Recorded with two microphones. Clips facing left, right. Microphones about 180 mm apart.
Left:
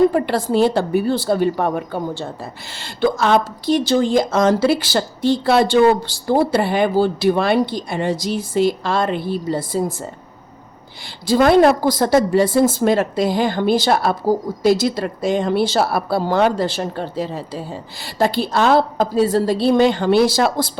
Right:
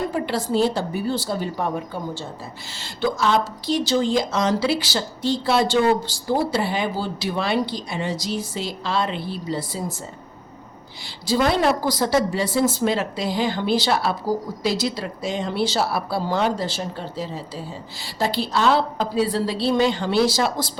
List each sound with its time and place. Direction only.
0.1 s a woman's voice: 55° left (ahead or behind)
11.3 s a woman's voice: 55° left (ahead or behind)